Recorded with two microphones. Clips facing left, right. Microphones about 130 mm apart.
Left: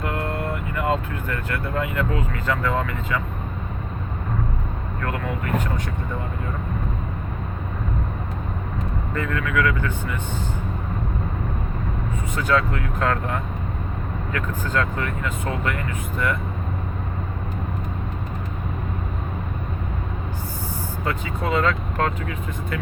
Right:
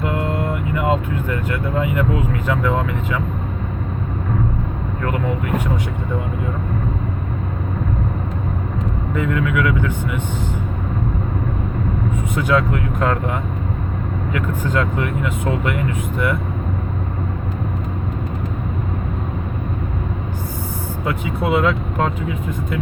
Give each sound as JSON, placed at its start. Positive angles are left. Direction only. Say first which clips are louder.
{"t": 0.0, "sound": "speech", "louder": "right 5 dB", "side_deg": -15}
{"t": 9.1, "sound": "speech", "louder": "right 4 dB", "side_deg": -15}
{"t": 12.4, "sound": "speech", "louder": "right 3 dB", "side_deg": -15}
{"t": 21.0, "sound": "speech", "louder": "right 5 dB", "side_deg": -10}